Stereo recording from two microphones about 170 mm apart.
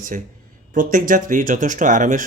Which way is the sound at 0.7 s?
50° right (ahead or behind).